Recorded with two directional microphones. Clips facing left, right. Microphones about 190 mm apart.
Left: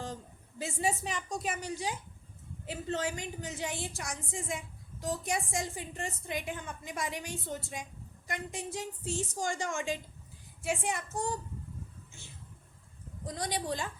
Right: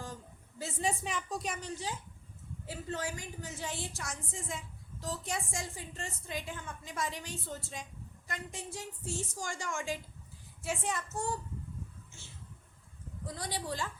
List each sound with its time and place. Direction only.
0.6 s a woman's voice: 5° left (ahead or behind)
13.2 s a woman's voice: 20° left (ahead or behind)